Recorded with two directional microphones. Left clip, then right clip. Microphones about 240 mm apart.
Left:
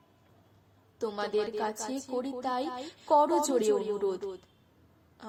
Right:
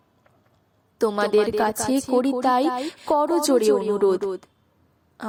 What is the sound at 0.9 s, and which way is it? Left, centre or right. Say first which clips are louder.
Speech: right 11 dB; right.